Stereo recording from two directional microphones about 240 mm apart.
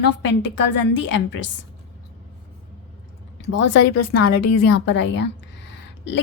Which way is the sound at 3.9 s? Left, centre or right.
Left.